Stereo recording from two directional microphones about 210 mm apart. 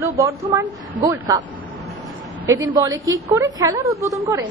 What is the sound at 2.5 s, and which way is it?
A woman's voice, 20° right (ahead or behind).